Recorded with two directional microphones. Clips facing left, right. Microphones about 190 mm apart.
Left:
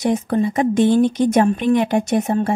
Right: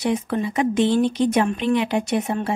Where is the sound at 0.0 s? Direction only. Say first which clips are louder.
Left 4 dB; 45° left (ahead or behind).